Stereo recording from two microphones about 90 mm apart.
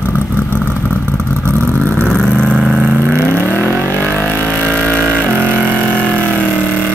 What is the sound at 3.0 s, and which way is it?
Vehicle, 25° right (ahead or behind).